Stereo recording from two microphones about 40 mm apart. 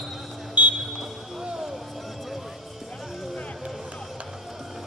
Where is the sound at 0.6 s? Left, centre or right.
Right.